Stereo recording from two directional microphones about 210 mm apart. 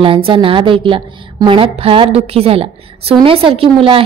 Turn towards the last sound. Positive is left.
turn(degrees=-25)  # may be behind; listen again after turning